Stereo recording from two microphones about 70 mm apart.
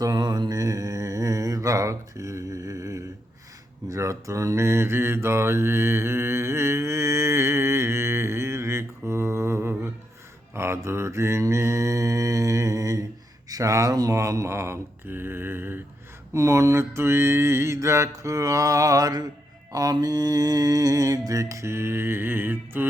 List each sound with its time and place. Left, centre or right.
0.0 s mantra: right
16.3 s mantra: right